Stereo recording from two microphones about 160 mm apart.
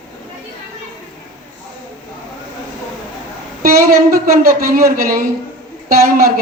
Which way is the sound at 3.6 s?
65° right (ahead or behind).